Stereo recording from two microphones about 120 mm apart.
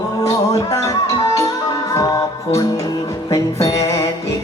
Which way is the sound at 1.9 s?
30° left (ahead or behind).